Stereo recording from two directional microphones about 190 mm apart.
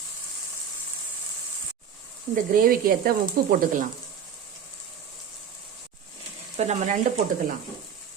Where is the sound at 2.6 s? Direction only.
50° right (ahead or behind).